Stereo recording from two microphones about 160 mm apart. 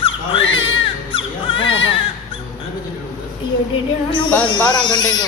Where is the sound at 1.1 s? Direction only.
35° left (ahead or behind).